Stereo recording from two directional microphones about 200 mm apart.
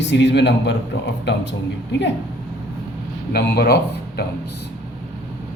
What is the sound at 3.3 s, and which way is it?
Speech, 55° left (ahead or behind).